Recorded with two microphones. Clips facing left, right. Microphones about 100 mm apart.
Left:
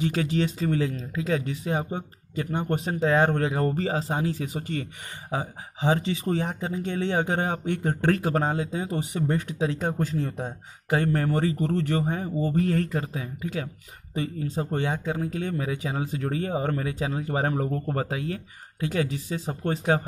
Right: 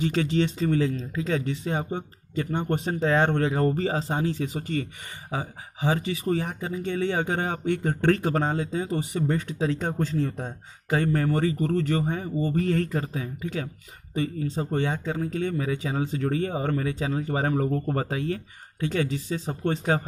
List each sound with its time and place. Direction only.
0.0 s speech: 10° left (ahead or behind)
18.9 s speech: 15° left (ahead or behind)